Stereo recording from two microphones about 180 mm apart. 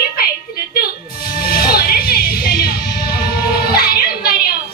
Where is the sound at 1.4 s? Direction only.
60° left (ahead or behind).